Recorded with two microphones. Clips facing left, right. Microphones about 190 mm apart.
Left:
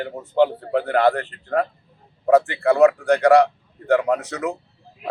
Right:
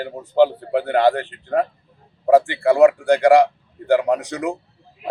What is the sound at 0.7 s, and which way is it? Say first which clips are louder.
Speech: right 1 dB; 30° right (ahead or behind).